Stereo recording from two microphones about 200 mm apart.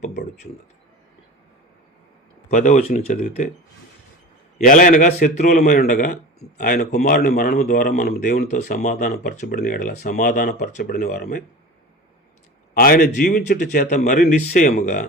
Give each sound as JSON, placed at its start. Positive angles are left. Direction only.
{"t": 0.0, "sound": "speech", "side_deg": 55}
{"t": 2.5, "sound": "a man's voice", "side_deg": 35}
{"t": 4.5, "sound": "a man's voice", "side_deg": 40}
{"t": 8.8, "sound": "speech", "side_deg": 40}
{"t": 12.7, "sound": "speech", "side_deg": 45}